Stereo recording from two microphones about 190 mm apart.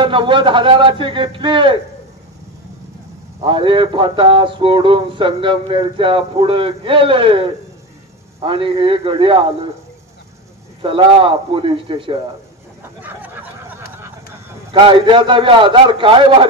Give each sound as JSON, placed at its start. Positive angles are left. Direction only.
{"t": 0.0, "sound": "speech", "side_deg": -25}
{"t": 3.4, "sound": "speech", "side_deg": -25}
{"t": 10.8, "sound": "speech", "side_deg": -25}
{"t": 13.0, "sound": "a sound", "side_deg": -10}
{"t": 14.7, "sound": "speech", "side_deg": -30}